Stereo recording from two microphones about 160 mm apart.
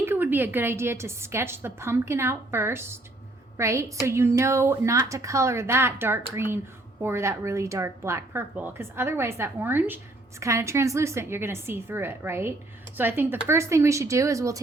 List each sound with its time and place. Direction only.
0.0 s speech: 15° right (ahead or behind)